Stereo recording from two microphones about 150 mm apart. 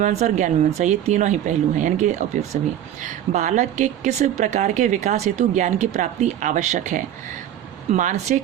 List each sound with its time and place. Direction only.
0.0 s speech: 50° right (ahead or behind)